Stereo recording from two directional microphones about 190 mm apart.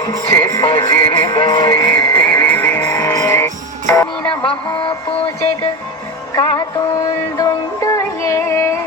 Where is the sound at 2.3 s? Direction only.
10° left (ahead or behind).